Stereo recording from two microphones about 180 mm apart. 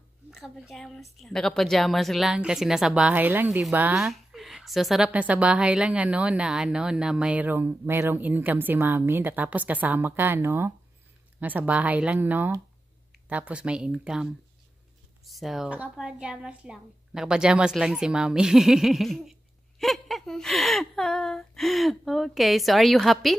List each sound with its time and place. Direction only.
0.3 s a woman's voice: centre (ahead or behind)